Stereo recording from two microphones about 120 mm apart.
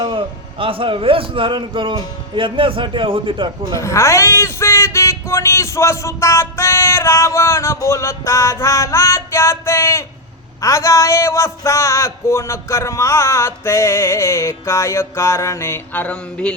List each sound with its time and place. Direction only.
0.0 s a man's voice: 45° right (ahead or behind)
3.8 s speech: 25° left (ahead or behind)